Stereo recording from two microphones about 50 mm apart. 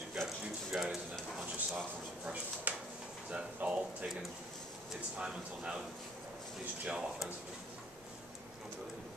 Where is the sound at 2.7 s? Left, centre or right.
Right.